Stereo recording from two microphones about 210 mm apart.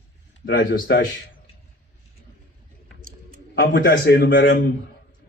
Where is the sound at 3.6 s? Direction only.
50° left (ahead or behind).